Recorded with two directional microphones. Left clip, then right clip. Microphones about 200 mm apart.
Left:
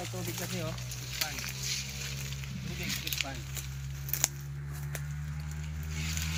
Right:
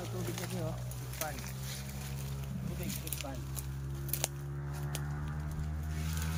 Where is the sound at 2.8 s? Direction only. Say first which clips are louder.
Left 10 dB; 10° right (ahead or behind).